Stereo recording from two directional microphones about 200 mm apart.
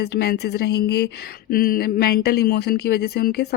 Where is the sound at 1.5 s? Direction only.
45° left (ahead or behind).